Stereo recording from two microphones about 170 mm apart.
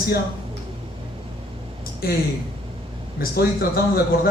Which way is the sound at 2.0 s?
60° left (ahead or behind).